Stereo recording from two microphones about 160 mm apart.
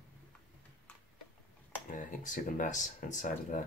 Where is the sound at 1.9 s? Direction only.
55° left (ahead or behind).